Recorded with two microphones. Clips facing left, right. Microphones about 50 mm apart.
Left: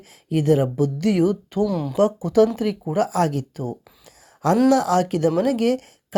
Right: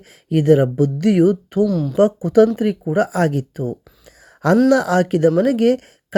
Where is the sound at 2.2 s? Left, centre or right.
Right.